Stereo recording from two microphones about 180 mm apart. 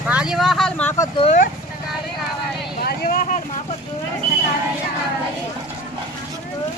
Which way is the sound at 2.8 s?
60° left (ahead or behind).